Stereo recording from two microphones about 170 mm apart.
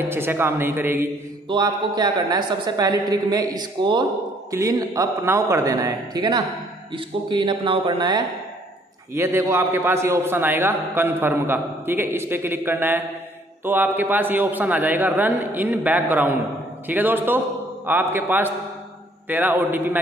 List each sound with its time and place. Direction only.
0.0 s a man's voice: 15° right (ahead or behind)
1.5 s speech: 25° right (ahead or behind)
9.1 s a man's voice: 15° right (ahead or behind)